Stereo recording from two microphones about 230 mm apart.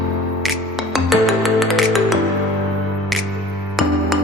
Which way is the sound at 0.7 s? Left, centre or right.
Centre.